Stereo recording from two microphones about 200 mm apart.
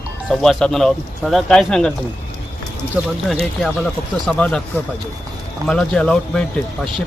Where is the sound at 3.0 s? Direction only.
10° right (ahead or behind).